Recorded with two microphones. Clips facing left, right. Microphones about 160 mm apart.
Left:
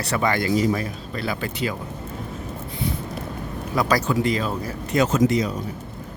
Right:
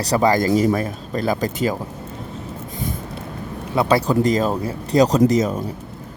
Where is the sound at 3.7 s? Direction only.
30° right (ahead or behind).